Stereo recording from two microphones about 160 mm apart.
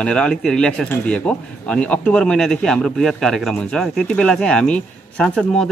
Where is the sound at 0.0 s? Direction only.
5° left (ahead or behind).